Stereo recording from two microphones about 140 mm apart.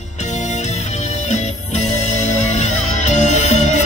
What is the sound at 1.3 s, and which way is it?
Music, 55° left (ahead or behind).